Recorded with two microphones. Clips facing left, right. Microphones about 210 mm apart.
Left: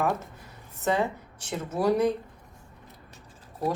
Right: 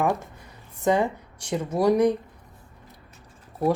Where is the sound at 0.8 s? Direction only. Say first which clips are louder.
Right 4 dB; 15° right (ahead or behind).